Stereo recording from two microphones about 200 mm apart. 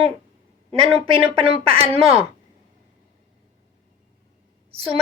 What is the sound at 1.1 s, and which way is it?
Speech, 25° right (ahead or behind).